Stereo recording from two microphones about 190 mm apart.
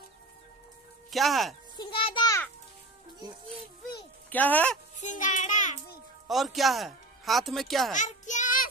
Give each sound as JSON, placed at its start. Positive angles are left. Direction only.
{"t": 1.1, "sound": "speech", "side_deg": 0}
{"t": 1.8, "sound": "a sound", "side_deg": 30}
{"t": 4.3, "sound": "speech", "side_deg": 10}
{"t": 5.0, "sound": "music", "side_deg": 40}
{"t": 6.2, "sound": "speech", "side_deg": 0}
{"t": 7.9, "sound": "a sound", "side_deg": 40}